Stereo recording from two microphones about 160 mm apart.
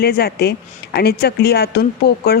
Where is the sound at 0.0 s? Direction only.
75° left (ahead or behind).